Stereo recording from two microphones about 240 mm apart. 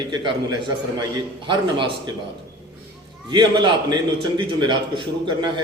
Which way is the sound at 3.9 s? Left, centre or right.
Centre.